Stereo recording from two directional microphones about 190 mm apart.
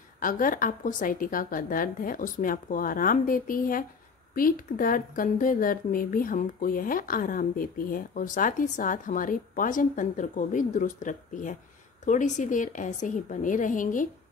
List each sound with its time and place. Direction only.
0.2 s a woman's voice: 45° left (ahead or behind)